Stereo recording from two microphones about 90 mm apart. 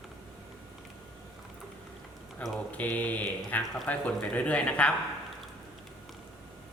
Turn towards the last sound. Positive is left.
turn(degrees=15)  # may be behind; listen again after turning